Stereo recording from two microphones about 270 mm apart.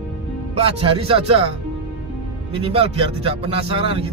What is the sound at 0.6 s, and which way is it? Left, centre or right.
Speech, right.